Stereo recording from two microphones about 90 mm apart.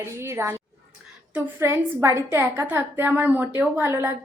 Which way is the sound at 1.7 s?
30° right (ahead or behind).